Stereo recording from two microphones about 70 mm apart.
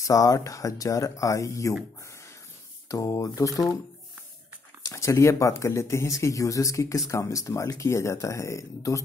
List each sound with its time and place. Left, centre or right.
0.0 s speech: left
2.9 s speech: left
4.8 s speech: left